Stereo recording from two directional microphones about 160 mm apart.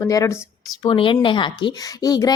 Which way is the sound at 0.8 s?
35° left (ahead or behind).